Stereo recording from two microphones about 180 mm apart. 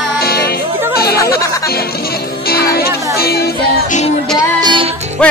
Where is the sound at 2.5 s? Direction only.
60° left (ahead or behind).